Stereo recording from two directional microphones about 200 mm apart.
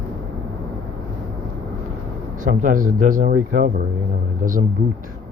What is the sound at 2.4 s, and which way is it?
Speech, 40° right (ahead or behind).